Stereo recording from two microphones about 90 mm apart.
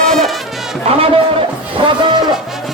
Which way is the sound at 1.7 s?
60° right (ahead or behind).